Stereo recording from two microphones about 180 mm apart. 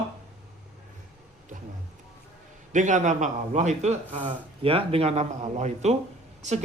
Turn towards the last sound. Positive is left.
turn(degrees=-40)  # may be behind; listen again after turning